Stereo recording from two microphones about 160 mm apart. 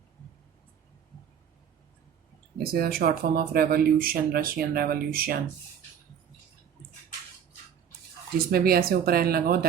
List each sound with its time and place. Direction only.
2.7 s speech: 70° right (ahead or behind)
8.4 s speech: 70° right (ahead or behind)